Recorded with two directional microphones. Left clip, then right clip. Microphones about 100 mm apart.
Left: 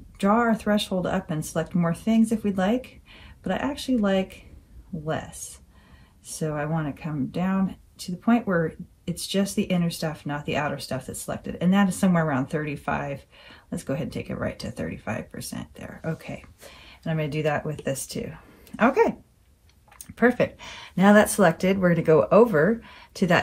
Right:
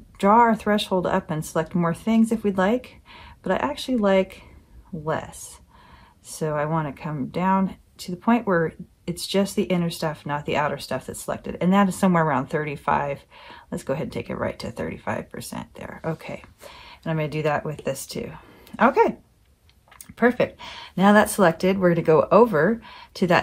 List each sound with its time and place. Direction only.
0.2 s speech: 70° right (ahead or behind)
16.8 s speech: 50° right (ahead or behind)
20.2 s speech: 15° right (ahead or behind)